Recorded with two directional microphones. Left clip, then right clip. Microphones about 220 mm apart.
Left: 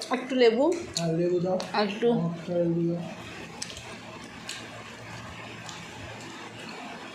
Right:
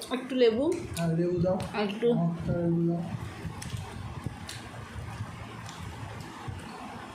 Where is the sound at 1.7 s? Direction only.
5° right (ahead or behind).